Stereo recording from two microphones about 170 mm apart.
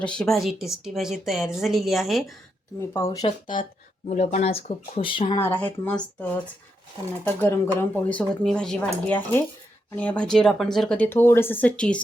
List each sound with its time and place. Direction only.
0.0 s a woman's voice: 5° left (ahead or behind)
2.9 s speech: 20° left (ahead or behind)
3.4 s speech: 50° left (ahead or behind)
5.0 s speech: 30° left (ahead or behind)
5.4 s speech: 10° left (ahead or behind)
7.4 s speech: 15° left (ahead or behind)